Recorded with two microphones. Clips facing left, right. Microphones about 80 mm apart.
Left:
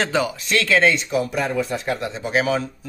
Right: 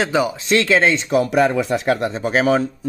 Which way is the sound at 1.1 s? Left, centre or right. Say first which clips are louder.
Right 6 dB; right.